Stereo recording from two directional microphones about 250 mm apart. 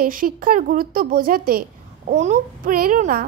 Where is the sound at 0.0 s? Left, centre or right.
Right.